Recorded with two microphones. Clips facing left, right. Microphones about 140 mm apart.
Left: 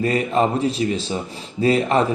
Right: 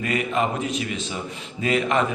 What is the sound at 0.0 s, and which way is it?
A man's voice, 35° left (ahead or behind).